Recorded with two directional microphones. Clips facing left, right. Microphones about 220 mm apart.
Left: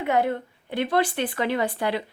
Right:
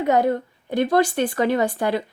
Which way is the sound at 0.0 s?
40° right (ahead or behind).